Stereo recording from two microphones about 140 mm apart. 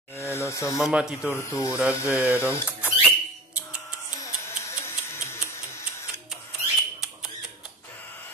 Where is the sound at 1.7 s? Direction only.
10° right (ahead or behind).